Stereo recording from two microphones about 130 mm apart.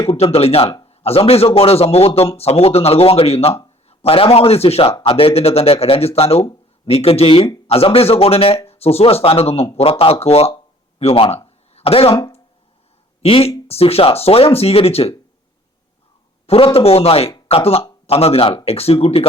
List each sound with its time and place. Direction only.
0.1 s speech: 50° left (ahead or behind)
11.0 s a sound: 50° left (ahead or behind)
13.2 s speech: 50° left (ahead or behind)
16.5 s speech: 45° left (ahead or behind)